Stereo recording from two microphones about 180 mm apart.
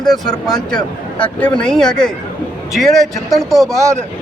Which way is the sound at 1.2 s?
5° left (ahead or behind).